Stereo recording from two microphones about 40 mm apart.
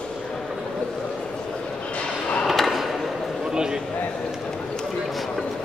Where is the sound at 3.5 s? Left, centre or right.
Centre.